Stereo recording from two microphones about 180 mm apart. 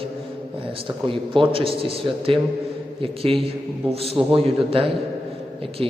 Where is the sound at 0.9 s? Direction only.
30° right (ahead or behind).